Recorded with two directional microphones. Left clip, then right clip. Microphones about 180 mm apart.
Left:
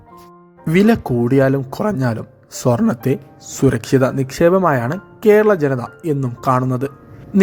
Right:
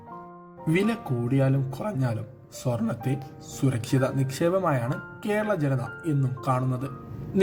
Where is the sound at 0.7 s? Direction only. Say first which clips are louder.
Left 12 dB; 65° left (ahead or behind).